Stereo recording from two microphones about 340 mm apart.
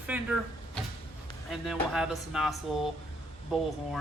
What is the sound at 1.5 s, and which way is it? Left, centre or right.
Speech, centre.